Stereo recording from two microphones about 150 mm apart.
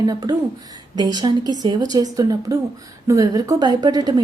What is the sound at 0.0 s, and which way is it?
A woman's voice, 25° right (ahead or behind).